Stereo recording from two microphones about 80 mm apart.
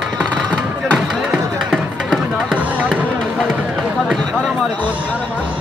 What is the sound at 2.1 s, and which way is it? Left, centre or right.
Music, centre.